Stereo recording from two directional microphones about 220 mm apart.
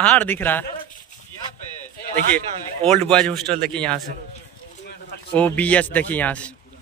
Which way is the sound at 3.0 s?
5° left (ahead or behind).